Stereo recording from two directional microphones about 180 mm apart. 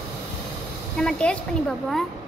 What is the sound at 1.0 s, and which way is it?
A woman's voice, 5° left (ahead or behind).